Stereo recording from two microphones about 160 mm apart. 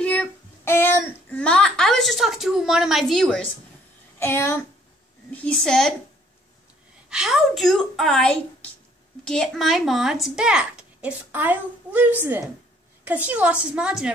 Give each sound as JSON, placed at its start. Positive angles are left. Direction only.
{"t": 0.0, "sound": "a sound", "side_deg": 10}
{"t": 4.2, "sound": "speech", "side_deg": 15}
{"t": 7.1, "sound": "a woman's voice", "side_deg": -5}